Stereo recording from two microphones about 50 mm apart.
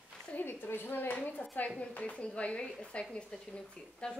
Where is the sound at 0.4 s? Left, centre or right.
Left.